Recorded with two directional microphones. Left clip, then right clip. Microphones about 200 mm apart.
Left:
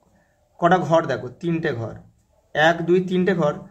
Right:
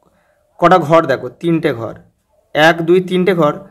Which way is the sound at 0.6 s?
40° right (ahead or behind).